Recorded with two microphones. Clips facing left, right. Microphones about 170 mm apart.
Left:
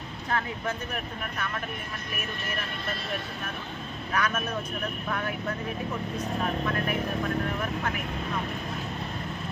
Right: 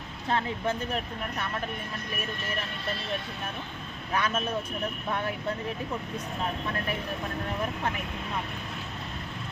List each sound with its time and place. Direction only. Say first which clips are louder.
0.3 s speech: right 2 dB; 30° right (ahead or behind)
4.1 s speech: right 1 dB; 30° right (ahead or behind)